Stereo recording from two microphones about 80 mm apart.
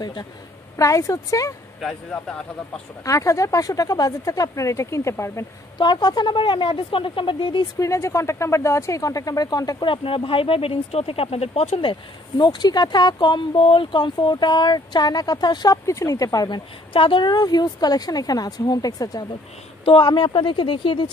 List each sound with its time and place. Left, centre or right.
0.7 s speech: left
1.8 s speech: centre
3.1 s speech: left
5.8 s speech: left
7.8 s speech: left
9.8 s speech: left
11.8 s speech: left
15.7 s speech: left
16.4 s speech: left
19.8 s speech: left